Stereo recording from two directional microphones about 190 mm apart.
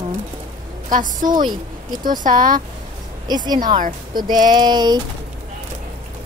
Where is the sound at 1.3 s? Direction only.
25° right (ahead or behind).